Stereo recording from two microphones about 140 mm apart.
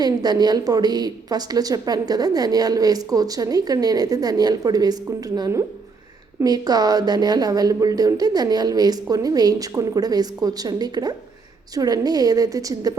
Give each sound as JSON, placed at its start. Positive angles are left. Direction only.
{"t": 0.0, "sound": "a woman's voice", "side_deg": -30}